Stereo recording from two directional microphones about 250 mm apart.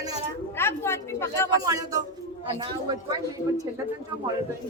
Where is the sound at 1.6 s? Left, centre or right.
Centre.